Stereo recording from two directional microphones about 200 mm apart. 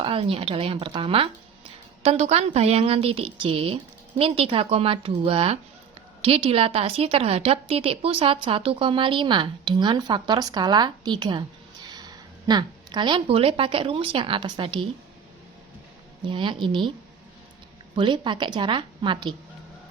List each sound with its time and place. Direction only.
0.0 s a woman's voice: 25° right (ahead or behind)
16.2 s a woman's voice: 25° right (ahead or behind)
17.9 s a woman's voice: 25° right (ahead or behind)